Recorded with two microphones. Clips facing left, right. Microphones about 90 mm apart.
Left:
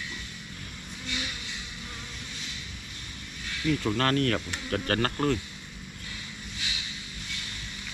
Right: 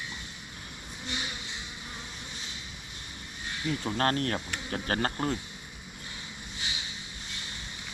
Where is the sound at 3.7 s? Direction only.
25° right (ahead or behind).